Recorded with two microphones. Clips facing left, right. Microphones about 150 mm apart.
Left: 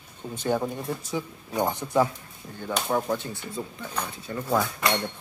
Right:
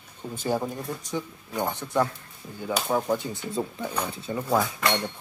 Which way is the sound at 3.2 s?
15° right (ahead or behind).